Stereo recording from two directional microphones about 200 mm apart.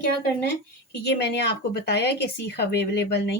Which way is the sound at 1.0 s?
55° left (ahead or behind).